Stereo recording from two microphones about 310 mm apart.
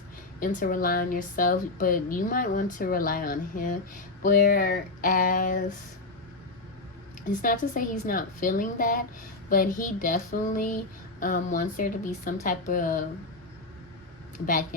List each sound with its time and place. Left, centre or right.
0.3 s speech: left
7.3 s speech: left